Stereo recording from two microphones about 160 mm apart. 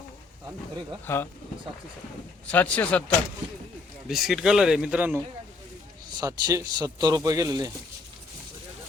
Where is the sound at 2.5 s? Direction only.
10° left (ahead or behind).